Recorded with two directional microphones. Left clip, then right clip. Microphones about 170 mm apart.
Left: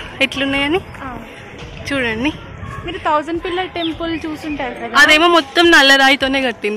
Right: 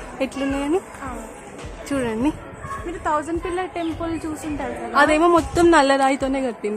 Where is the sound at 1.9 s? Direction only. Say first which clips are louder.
Left 5 dB; 5° right (ahead or behind).